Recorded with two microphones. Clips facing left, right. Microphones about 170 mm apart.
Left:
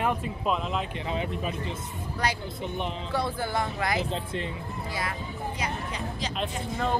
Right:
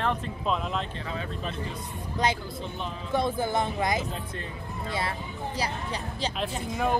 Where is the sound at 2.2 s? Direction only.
25° right (ahead or behind).